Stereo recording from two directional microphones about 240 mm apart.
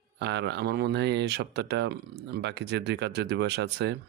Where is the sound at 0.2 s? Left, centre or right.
Right.